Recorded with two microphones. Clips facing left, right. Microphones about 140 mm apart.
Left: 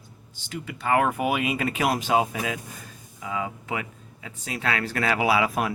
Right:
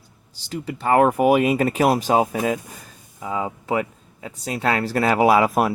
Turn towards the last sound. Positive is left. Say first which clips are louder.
# right 7 dB
turn(degrees=-40)  # may be behind; listen again after turning